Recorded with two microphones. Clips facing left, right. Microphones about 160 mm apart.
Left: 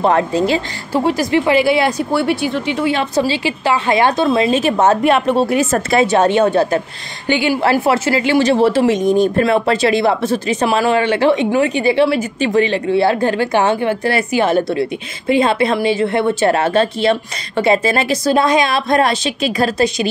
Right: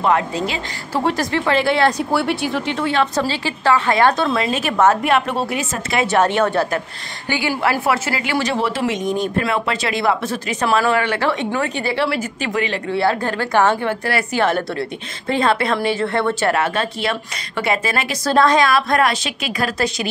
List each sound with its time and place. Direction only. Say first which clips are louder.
0.0 s a woman's voice: left 4 dB; 35° left (ahead or behind)
1.0 s a woman's voice: left 4 dB; 10° left (ahead or behind); by 5.5 s 25° left (ahead or behind)
5.5 s a woman's voice: left 8 dB; 40° left (ahead or behind)
6.0 s a woman's voice: even; 20° left (ahead or behind)
16.5 s a woman's voice: left 6 dB; 30° left (ahead or behind)
18.2 s a woman's voice: right 1 dB; 15° left (ahead or behind)